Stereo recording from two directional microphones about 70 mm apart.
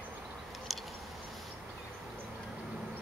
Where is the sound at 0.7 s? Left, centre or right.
Centre.